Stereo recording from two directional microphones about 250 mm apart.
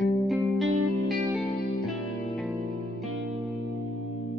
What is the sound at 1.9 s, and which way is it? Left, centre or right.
Music, centre.